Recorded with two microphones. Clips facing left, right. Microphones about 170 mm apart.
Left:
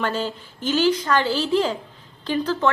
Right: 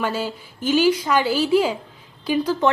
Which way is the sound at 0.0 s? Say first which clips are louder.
Even; 10° right (ahead or behind).